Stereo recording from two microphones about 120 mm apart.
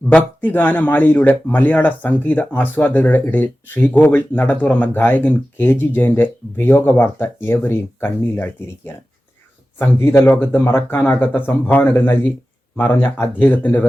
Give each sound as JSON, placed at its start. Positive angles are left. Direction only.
{"t": 0.1, "sound": "speech", "side_deg": 15}